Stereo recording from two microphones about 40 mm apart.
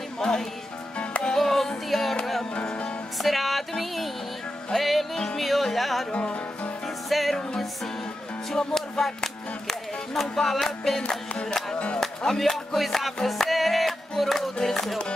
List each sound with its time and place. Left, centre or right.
0.9 s music: left
1.4 s music: centre
2.5 s music: left
3.2 s music: centre
6.1 s music: left
7.1 s music: centre
7.3 s music: centre
12.4 s music: centre